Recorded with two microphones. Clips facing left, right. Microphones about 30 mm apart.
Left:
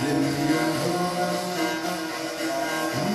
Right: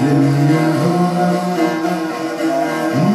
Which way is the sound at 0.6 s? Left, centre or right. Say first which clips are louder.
Right 9 dB; right.